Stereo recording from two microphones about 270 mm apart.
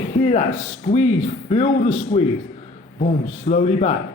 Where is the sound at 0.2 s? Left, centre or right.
Left.